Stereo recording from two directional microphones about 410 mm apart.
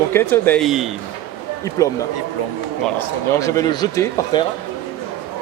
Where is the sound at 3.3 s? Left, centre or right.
Centre.